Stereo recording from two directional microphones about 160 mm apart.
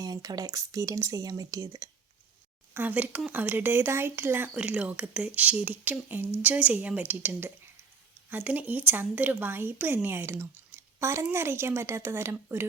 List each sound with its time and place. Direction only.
0.0 s speech: 25° right (ahead or behind)
2.7 s a woman's voice: 10° right (ahead or behind)